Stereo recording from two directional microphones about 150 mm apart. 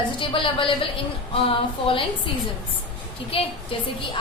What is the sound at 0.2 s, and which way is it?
A woman's voice, 35° left (ahead or behind).